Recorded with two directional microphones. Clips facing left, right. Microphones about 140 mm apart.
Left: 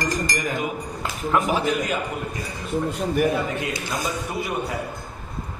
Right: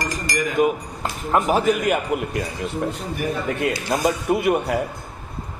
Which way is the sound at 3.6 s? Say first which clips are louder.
Right 6 dB; 60° right (ahead or behind).